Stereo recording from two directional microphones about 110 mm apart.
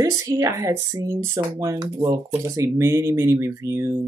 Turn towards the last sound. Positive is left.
turn(degrees=-25)  # may be behind; listen again after turning